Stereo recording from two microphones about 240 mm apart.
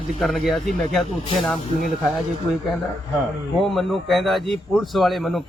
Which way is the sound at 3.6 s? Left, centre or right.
Centre.